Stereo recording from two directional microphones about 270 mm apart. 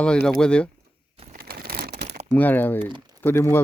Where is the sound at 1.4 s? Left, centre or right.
Right.